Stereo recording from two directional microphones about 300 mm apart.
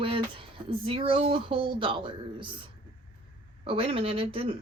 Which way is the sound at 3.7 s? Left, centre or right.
Centre.